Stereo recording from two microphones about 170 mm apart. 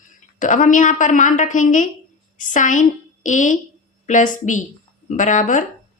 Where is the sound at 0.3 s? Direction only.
50° left (ahead or behind).